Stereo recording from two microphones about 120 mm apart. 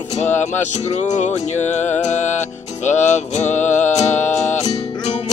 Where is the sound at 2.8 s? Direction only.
80° left.